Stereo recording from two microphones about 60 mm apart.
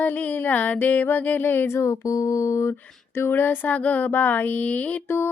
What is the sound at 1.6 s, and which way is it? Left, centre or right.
Speech, left.